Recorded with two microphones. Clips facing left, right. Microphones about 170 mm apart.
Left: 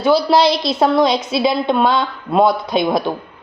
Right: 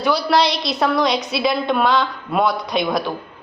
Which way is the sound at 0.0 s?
25° left (ahead or behind).